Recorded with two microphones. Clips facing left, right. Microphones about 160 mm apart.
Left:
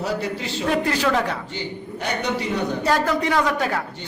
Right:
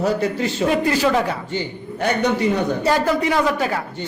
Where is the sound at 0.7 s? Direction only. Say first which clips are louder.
Right 1 dB; 10° right (ahead or behind).